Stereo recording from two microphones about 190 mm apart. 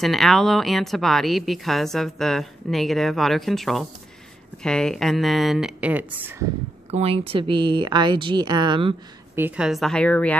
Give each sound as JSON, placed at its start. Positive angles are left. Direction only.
{"t": 0.0, "sound": "a woman's voice", "side_deg": 0}
{"t": 6.9, "sound": "speech", "side_deg": -30}
{"t": 9.3, "sound": "a woman's voice", "side_deg": -5}